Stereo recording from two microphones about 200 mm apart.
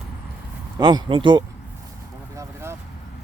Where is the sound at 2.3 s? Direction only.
15° right (ahead or behind).